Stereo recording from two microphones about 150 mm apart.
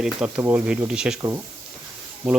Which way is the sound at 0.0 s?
5° right (ahead or behind).